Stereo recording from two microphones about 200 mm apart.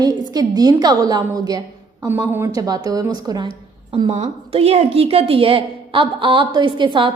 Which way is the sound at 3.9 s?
30° right (ahead or behind).